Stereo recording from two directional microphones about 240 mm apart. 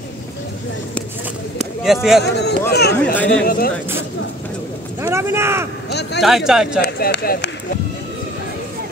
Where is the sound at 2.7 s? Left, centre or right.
Left.